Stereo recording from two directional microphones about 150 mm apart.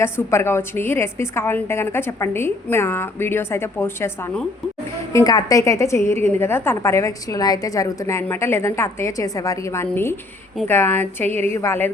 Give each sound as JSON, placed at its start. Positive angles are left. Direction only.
{"t": 0.0, "sound": "a woman's voice", "side_deg": 15}
{"t": 5.1, "sound": "a woman's voice", "side_deg": 25}